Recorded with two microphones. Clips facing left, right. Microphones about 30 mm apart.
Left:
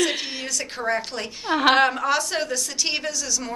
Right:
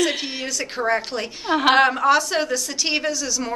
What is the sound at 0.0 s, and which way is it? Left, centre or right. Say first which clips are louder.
A woman's voice: right 2 dB; centre.